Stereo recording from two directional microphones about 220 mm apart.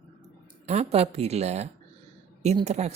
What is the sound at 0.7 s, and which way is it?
Speech, 30° right (ahead or behind).